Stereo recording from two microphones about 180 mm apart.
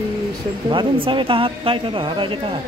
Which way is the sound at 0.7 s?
30° right (ahead or behind).